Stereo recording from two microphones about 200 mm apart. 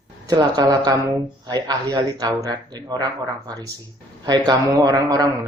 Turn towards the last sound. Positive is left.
turn(degrees=-20)  # may be behind; listen again after turning